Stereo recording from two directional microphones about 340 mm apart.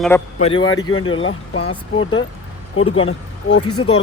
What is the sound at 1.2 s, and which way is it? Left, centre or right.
Speech, left.